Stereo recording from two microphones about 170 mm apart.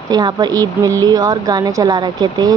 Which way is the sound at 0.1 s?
25° right (ahead or behind).